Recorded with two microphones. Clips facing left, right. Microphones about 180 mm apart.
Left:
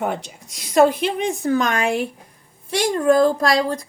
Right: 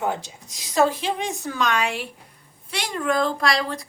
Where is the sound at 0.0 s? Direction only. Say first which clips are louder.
Left 2 dB; 65° left (ahead or behind).